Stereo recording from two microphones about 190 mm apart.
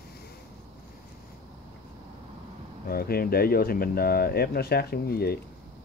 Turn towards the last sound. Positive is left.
turn(degrees=55)  # may be behind; listen again after turning